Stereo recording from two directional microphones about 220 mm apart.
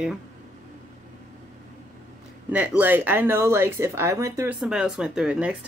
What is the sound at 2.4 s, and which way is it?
Speech, 5° right (ahead or behind).